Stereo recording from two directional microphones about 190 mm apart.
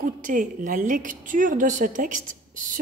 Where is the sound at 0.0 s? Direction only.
45° right (ahead or behind).